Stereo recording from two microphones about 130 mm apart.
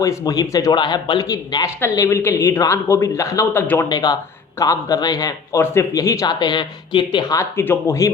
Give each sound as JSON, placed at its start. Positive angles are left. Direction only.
{"t": 0.0, "sound": "speech", "side_deg": 25}
{"t": 3.8, "sound": "speech", "side_deg": 30}